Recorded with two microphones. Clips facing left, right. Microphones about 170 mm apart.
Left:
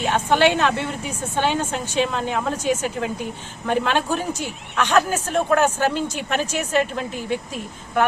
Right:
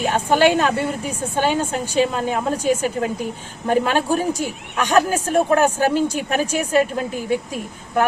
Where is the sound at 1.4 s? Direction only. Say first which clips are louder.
Right 2 dB; 10° right (ahead or behind).